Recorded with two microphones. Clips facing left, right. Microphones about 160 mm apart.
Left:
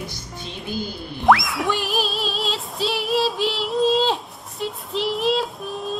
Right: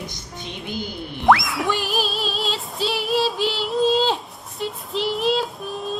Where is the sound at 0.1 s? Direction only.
20° right (ahead or behind).